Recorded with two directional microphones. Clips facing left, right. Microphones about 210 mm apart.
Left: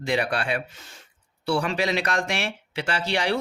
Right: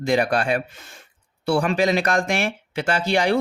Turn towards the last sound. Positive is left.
turn(degrees=-50)  # may be behind; listen again after turning